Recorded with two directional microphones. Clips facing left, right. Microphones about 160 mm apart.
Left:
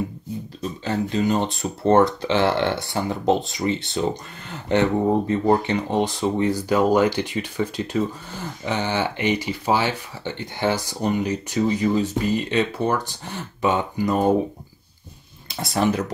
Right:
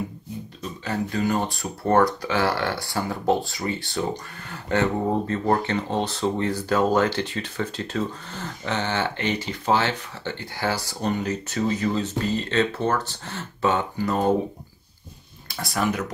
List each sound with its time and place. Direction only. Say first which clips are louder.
0.6 s speech: left 3 dB; 25° left (ahead or behind)
15.4 s speech: left 4 dB; 25° left (ahead or behind)